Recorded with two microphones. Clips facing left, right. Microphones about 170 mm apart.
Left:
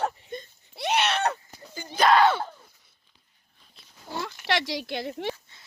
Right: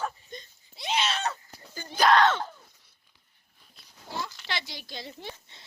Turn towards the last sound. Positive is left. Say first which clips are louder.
# right 2 dB
turn(degrees=-25)  # may be behind; listen again after turning